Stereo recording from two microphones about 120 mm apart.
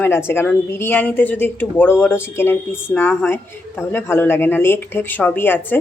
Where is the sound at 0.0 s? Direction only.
20° left (ahead or behind).